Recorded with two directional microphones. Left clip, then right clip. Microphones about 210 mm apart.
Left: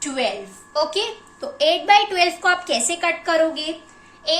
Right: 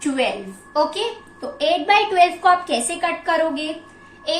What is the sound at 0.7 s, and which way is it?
A woman's voice, 50° left (ahead or behind).